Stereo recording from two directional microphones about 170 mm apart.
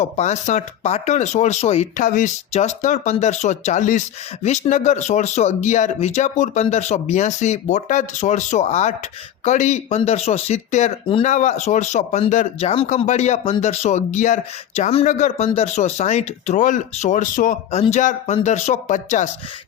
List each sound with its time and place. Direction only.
0.0 s speech: 45° left (ahead or behind)